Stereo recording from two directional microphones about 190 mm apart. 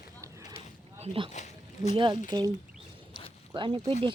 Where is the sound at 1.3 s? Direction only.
35° left (ahead or behind).